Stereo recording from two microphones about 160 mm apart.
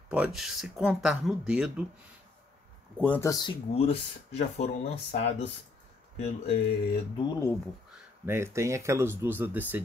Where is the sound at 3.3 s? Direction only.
25° left (ahead or behind).